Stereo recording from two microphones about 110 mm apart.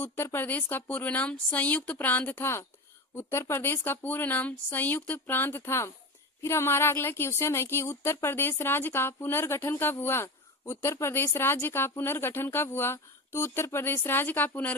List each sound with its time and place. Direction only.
0.0 s speech: 20° left (ahead or behind)